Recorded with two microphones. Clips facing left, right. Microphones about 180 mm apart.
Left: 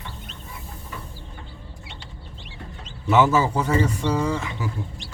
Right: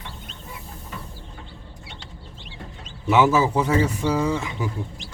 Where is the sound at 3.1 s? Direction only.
Centre (ahead or behind).